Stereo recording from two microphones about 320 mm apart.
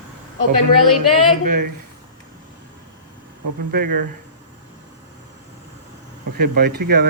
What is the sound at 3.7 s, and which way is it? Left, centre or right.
Speech, right.